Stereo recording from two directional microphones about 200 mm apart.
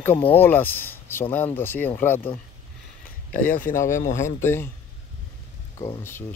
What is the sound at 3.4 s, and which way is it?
Speech, 45° left (ahead or behind).